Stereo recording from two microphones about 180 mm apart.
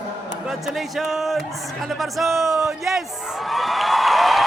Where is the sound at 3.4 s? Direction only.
Centre (ahead or behind).